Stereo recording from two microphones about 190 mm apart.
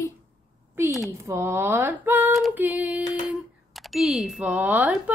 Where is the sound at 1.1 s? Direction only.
15° right (ahead or behind).